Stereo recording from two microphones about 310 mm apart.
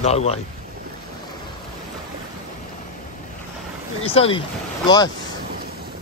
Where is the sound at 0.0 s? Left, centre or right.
Left.